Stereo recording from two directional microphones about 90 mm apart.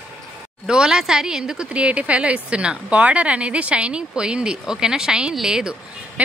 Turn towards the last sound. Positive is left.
turn(degrees=-10)  # may be behind; listen again after turning